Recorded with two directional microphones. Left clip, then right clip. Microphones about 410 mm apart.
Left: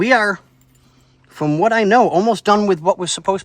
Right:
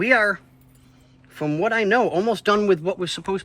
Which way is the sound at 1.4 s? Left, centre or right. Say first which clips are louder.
Left 6 dB; centre.